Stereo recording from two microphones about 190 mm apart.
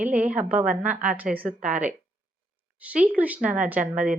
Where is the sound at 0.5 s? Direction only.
5° right (ahead or behind).